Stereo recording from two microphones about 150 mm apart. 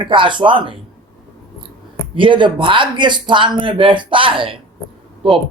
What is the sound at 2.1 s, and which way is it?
Speech, 35° right (ahead or behind).